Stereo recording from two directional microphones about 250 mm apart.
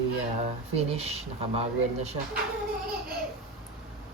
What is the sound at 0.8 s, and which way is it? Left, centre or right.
Speech, right.